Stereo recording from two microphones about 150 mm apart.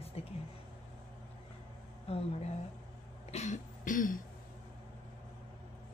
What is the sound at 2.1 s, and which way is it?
Speech, 45° left (ahead or behind).